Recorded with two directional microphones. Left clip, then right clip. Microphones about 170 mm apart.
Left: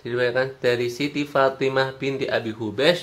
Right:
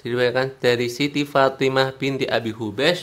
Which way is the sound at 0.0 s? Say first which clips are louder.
Right 2 dB; 55° right (ahead or behind).